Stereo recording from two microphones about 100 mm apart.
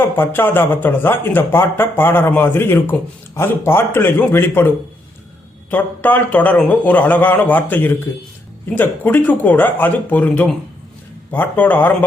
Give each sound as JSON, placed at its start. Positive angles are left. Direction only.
{"t": 0.2, "sound": "speech", "side_deg": 20}
{"t": 5.7, "sound": "a man's voice", "side_deg": 15}